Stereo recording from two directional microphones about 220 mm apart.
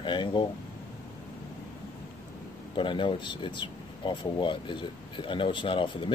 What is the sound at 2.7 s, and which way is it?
Speech, 20° left (ahead or behind).